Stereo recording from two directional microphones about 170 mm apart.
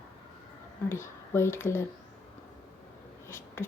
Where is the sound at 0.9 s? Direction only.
15° left (ahead or behind).